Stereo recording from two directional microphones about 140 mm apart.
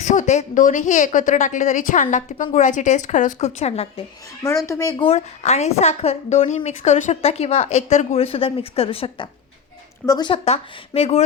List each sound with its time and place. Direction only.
0.0 s a woman's voice: 60° left (ahead or behind)
4.4 s speech: 20° left (ahead or behind)
4.9 s a woman's voice: 45° left (ahead or behind)
10.1 s speech: 30° left (ahead or behind)
10.3 s a woman's voice: 45° left (ahead or behind)